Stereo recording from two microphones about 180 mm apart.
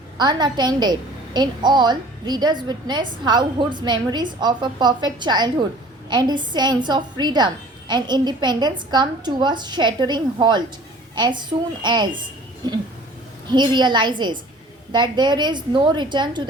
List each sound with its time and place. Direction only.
0.2 s a woman's voice: 25° right (ahead or behind)
13.5 s a woman's voice: 25° right (ahead or behind)